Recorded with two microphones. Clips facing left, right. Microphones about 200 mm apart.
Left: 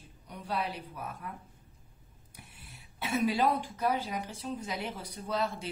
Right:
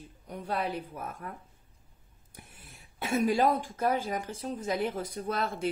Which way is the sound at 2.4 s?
50° right (ahead or behind).